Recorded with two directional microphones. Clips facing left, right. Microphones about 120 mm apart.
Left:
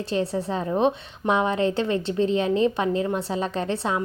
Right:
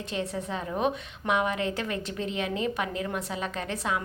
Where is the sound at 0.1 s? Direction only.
35° left (ahead or behind).